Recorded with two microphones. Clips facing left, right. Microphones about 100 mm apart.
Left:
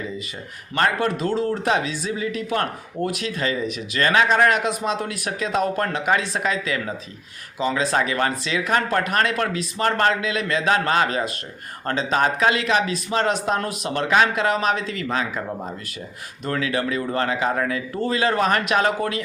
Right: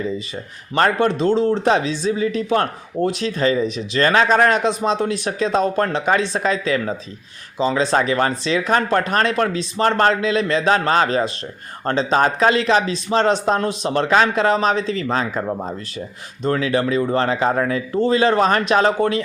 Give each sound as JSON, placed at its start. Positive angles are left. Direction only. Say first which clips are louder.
{"t": 0.8, "sound": "speech", "louder": "right 4 dB", "side_deg": -25}